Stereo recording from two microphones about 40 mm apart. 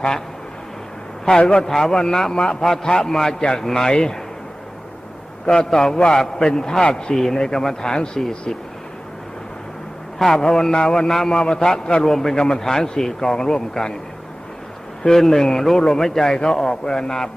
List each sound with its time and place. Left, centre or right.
1.4 s speech: left
1.6 s a man's voice: centre
5.5 s a man's voice: centre
7.3 s speech: centre
10.2 s a man's voice: centre
15.0 s a man's voice: centre